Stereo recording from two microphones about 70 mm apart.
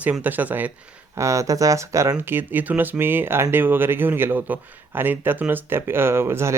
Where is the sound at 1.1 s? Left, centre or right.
Right.